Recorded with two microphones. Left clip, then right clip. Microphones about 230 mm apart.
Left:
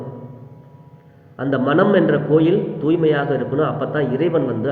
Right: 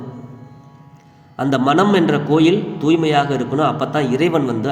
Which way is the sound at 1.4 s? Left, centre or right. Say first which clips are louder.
Right 2 dB; right.